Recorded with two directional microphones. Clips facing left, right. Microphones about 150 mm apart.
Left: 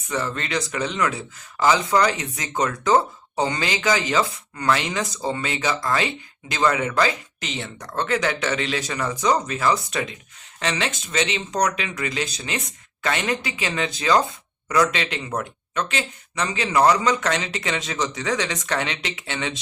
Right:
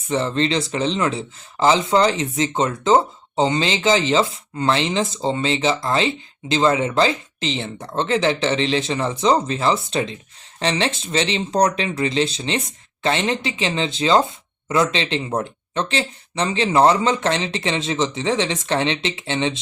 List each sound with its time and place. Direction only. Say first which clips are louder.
0.1 s speech: right 6 dB; 25° right (ahead or behind)